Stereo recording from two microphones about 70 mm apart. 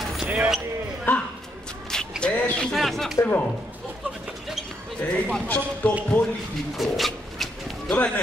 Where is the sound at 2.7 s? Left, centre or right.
Centre.